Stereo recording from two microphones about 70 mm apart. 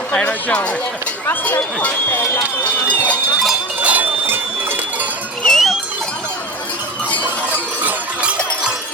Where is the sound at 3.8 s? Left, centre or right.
Right.